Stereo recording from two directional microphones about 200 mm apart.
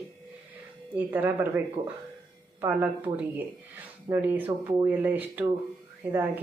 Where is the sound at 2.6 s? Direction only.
10° right (ahead or behind).